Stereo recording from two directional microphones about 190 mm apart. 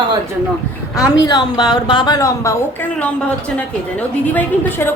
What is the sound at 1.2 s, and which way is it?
A woman's voice, 20° left (ahead or behind).